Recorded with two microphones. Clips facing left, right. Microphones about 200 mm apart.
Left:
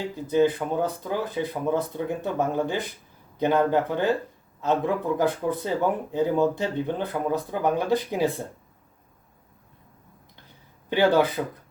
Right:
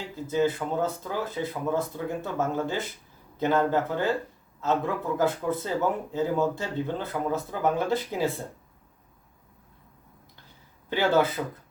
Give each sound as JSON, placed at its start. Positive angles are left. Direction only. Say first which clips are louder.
{"t": 0.2, "sound": "speech", "louder": "left 4 dB", "side_deg": 15}
{"t": 10.8, "sound": "speech", "louder": "left 3 dB", "side_deg": 15}